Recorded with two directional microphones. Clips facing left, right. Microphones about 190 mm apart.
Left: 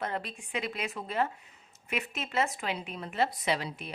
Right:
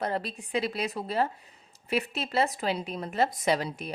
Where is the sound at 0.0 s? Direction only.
35° right (ahead or behind).